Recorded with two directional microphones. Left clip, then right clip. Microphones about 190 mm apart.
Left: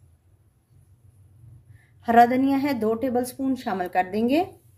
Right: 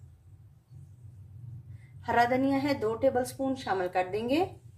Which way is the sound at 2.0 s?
60° left (ahead or behind).